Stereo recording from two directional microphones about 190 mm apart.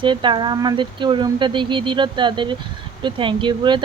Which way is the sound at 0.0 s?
25° right (ahead or behind).